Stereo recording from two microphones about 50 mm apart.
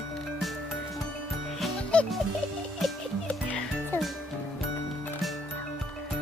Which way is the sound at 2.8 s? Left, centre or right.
Centre.